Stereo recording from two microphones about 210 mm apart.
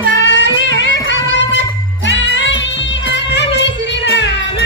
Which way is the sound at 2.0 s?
60° left (ahead or behind).